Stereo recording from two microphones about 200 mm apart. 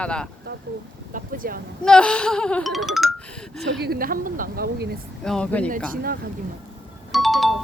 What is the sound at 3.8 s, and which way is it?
A woman's voice, 45° right (ahead or behind).